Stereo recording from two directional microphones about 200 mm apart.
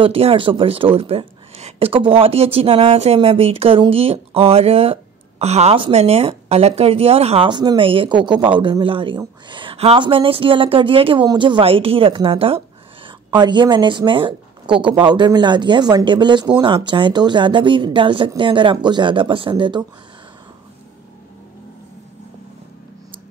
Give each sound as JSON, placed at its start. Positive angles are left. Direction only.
{"t": 0.0, "sound": "a woman's voice", "side_deg": -30}